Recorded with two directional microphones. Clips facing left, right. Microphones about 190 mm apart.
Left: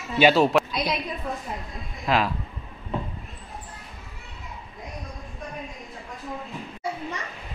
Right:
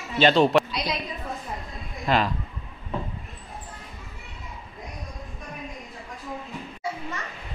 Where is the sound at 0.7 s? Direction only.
50° left (ahead or behind).